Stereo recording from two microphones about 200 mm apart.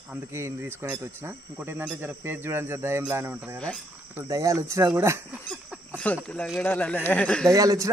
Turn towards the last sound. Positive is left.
turn(degrees=-15)  # may be behind; listen again after turning